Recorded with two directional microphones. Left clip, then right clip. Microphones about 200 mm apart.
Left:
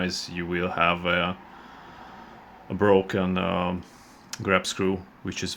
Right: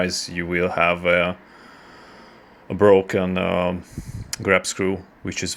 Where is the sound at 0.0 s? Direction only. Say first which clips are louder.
Right 6 dB; 20° right (ahead or behind).